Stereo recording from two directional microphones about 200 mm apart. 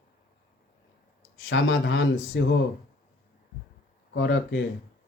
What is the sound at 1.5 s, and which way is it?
Speech, 70° left (ahead or behind).